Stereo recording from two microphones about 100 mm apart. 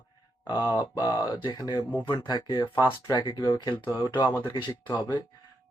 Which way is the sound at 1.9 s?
20° left (ahead or behind).